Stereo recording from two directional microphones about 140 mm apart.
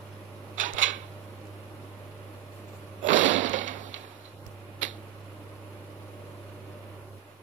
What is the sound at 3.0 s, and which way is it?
Sewing machine, 60° right (ahead or behind).